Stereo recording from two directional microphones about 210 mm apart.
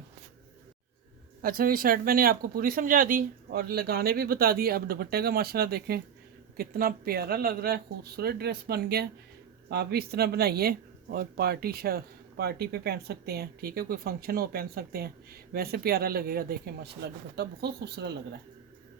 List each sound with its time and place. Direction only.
1.4 s speech: 45° right (ahead or behind)